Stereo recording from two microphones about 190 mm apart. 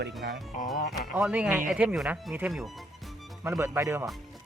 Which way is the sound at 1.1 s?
5° right (ahead or behind).